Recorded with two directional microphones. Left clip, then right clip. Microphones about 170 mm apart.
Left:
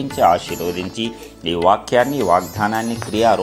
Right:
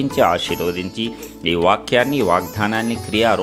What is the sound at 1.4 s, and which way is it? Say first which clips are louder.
Speech: left 1 dB; 25° right (ahead or behind).